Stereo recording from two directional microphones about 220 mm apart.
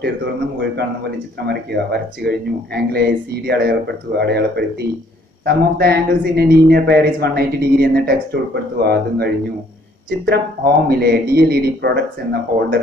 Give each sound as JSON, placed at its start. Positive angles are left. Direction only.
{"t": 0.0, "sound": "speech", "side_deg": -50}